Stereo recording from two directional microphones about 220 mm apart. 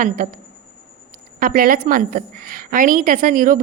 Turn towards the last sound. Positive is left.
turn(degrees=-40)  # may be behind; listen again after turning